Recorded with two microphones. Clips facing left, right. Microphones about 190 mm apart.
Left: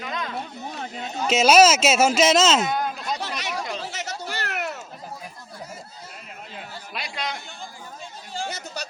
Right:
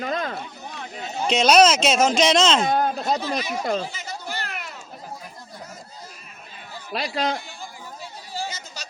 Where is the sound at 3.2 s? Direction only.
80° left.